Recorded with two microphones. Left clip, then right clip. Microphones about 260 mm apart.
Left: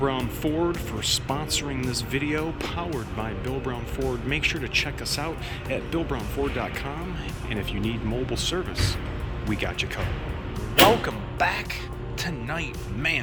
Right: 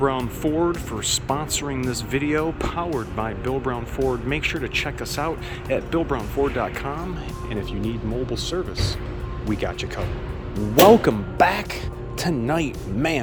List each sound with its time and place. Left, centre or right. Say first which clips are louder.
0.0 s speech: right 4 dB; centre
11.0 s speech: right 7 dB; right